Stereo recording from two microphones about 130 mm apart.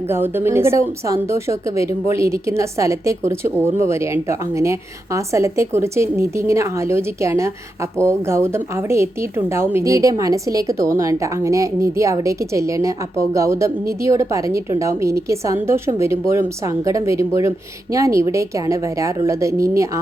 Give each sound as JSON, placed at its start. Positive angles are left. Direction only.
{"t": 0.1, "sound": "a woman's voice", "side_deg": -20}